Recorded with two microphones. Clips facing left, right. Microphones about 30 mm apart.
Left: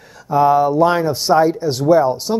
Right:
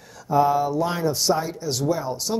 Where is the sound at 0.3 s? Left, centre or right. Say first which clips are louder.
Left 6 dB; left.